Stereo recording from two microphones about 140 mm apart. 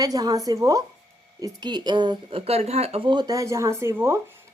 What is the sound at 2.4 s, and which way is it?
Speech, 45° right (ahead or behind).